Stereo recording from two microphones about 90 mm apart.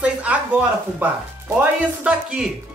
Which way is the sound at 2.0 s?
10° right (ahead or behind).